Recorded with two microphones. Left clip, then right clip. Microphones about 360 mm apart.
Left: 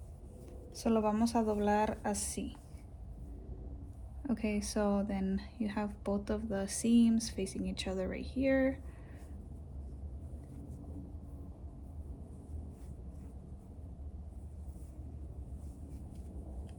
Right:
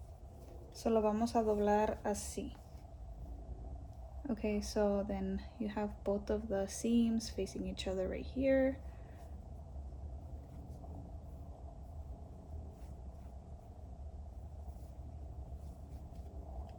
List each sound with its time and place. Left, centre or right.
0.7 s speech: centre
4.3 s speech: centre